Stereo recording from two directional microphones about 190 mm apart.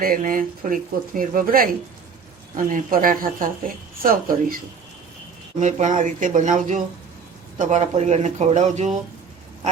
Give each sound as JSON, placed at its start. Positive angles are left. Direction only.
{"t": 0.0, "sound": "speech", "side_deg": -50}